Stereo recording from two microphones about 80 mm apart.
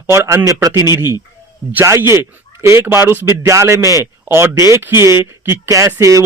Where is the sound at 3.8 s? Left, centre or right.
Left.